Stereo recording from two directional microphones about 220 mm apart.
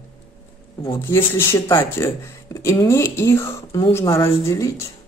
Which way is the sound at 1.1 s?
10° left (ahead or behind).